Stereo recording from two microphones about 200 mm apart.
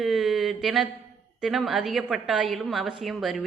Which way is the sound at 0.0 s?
Centre (ahead or behind).